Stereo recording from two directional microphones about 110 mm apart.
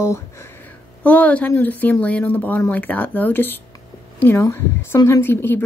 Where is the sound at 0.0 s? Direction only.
25° left (ahead or behind).